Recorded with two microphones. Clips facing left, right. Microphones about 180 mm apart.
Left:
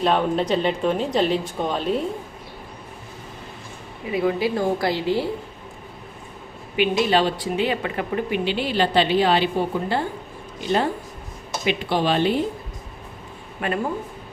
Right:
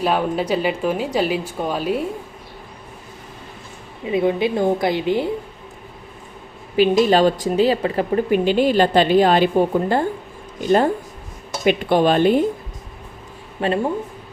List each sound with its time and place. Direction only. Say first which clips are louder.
0.0 s speech: even; 5° right (ahead or behind)
4.0 s a woman's voice: right 3 dB; 25° right (ahead or behind)
6.7 s speech: right 5 dB; 40° right (ahead or behind)
13.6 s speech: right 5 dB; 30° right (ahead or behind)